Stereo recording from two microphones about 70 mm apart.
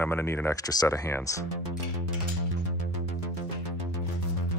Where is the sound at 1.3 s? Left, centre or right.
Left.